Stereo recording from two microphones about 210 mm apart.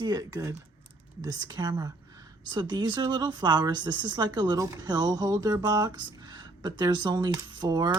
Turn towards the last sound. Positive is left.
turn(degrees=-20)  # may be behind; listen again after turning